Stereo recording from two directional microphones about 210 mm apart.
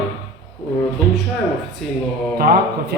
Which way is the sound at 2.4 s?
45° right (ahead or behind).